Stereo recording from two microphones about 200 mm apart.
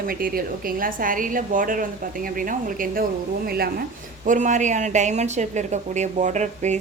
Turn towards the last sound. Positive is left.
turn(degrees=-35)  # may be behind; listen again after turning